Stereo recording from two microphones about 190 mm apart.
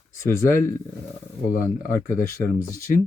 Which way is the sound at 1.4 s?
50° left (ahead or behind).